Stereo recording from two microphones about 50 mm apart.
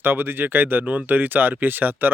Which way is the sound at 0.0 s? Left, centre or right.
Right.